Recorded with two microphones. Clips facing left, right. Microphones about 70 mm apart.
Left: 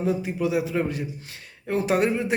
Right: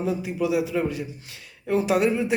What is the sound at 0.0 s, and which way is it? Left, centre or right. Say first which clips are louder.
A man's voice: left 1 dB; left.